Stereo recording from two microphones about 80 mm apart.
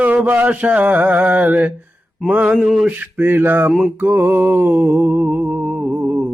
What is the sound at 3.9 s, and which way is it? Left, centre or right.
Music, right.